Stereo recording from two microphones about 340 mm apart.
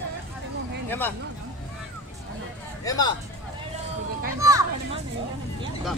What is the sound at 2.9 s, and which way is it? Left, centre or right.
Speech, centre.